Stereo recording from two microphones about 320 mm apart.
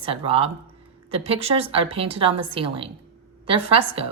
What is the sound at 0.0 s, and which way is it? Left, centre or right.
A woman's voice, centre.